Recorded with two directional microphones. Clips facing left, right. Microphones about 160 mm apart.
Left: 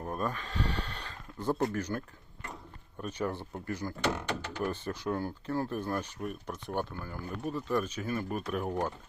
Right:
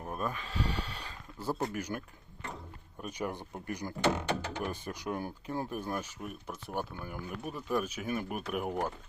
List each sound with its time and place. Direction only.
0.0 s speech: 5° right (ahead or behind)